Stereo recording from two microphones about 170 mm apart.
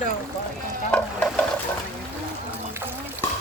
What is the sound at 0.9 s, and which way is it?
Stir, 5° left (ahead or behind).